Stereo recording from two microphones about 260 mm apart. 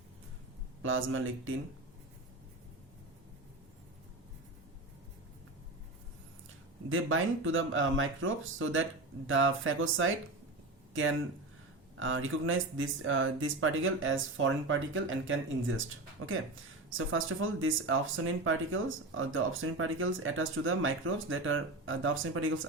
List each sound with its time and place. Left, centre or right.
0.8 s speech: right
6.9 s speech: right
11.9 s speech: right
16.9 s speech: right